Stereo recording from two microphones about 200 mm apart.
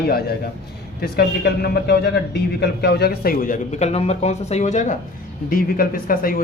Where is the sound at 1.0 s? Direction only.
50° left (ahead or behind).